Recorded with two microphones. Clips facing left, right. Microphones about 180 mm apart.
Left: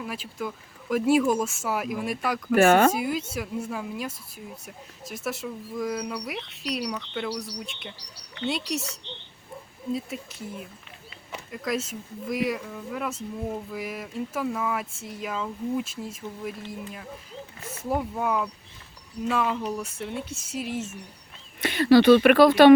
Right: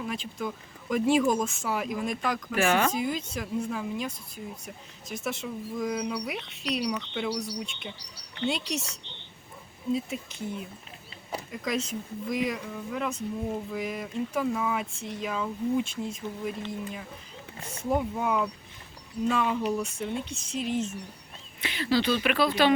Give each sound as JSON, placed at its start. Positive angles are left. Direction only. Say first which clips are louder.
{"t": 0.0, "sound": "speech", "louder": "even", "side_deg": 5}
{"t": 2.6, "sound": "speech", "louder": "left 7 dB", "side_deg": 50}
{"t": 2.9, "sound": "speech", "louder": "left 2 dB", "side_deg": 5}
{"t": 9.9, "sound": "speech", "louder": "right 1 dB", "side_deg": 0}
{"t": 21.6, "sound": "speech", "louder": "left 9 dB", "side_deg": 50}